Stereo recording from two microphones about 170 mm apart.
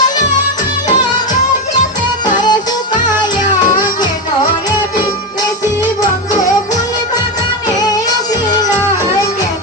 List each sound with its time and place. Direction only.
2.4 s music: 25° left (ahead or behind)